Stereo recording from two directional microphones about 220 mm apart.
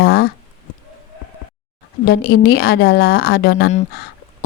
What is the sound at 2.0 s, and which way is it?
A woman's voice, 45° left (ahead or behind).